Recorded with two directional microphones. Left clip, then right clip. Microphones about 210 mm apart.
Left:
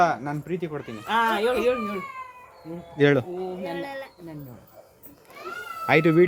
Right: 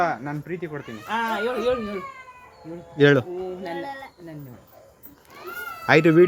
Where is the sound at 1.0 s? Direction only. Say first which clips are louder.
Left 3 dB; 55° left (ahead or behind).